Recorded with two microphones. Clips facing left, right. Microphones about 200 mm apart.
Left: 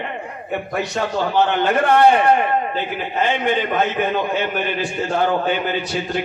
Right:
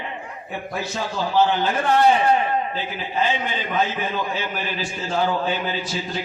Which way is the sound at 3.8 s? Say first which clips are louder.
Left 4 dB; 60° left (ahead or behind).